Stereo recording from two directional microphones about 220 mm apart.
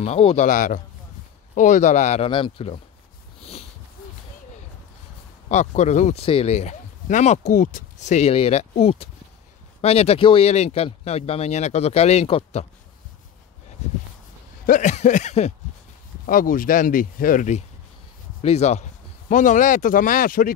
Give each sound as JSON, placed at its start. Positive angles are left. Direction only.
{"t": 0.0, "sound": "speech", "side_deg": 25}
{"t": 5.5, "sound": "speech", "side_deg": 30}
{"t": 14.7, "sound": "a man's voice", "side_deg": 35}